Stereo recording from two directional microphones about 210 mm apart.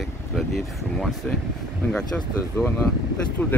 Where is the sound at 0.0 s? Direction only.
Centre (ahead or behind).